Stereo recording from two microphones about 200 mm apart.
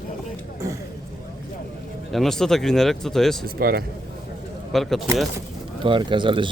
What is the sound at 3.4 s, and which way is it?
Speech, 50° right (ahead or behind).